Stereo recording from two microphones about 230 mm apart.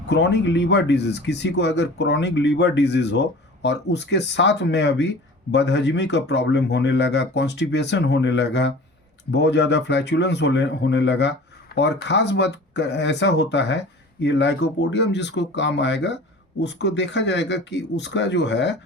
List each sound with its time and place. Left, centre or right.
0.1 s speech: left